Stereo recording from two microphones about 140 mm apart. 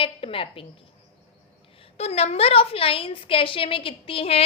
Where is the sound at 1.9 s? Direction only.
45° left (ahead or behind).